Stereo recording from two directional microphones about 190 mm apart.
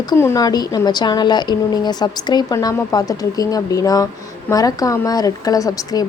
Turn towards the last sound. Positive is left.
turn(degrees=20)  # may be behind; listen again after turning